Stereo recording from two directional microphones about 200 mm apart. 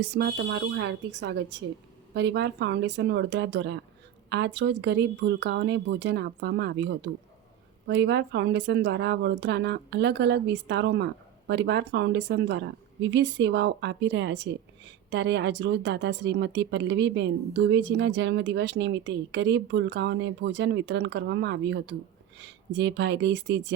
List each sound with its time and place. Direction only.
0.0 s speech: 50° right (ahead or behind)